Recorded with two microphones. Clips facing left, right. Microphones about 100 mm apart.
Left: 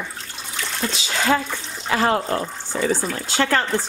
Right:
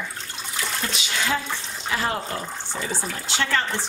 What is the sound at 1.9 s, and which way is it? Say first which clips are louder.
Speech: left 7 dB; 90° left.